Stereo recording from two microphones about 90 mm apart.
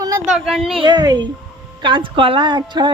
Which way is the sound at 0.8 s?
50° right (ahead or behind).